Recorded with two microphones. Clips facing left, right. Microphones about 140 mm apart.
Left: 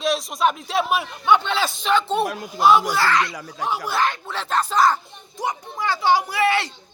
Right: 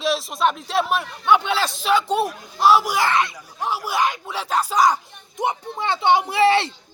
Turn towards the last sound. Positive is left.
turn(degrees=-25)  # may be behind; listen again after turning